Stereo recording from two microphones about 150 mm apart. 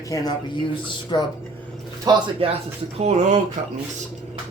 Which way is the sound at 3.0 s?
50° right (ahead or behind).